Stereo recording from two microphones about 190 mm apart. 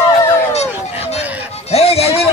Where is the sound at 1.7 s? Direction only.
35° left (ahead or behind).